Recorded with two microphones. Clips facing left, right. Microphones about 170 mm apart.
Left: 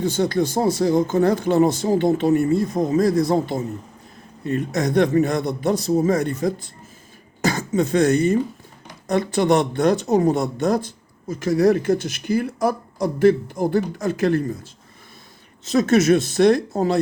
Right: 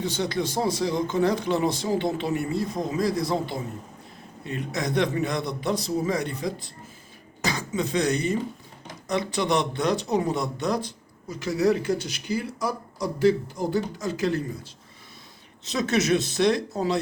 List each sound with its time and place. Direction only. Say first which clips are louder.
0.0 s speech: left 7 dB; 45° left (ahead or behind)